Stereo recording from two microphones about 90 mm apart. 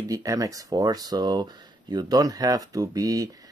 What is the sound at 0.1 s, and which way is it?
Speech, 40° right (ahead or behind).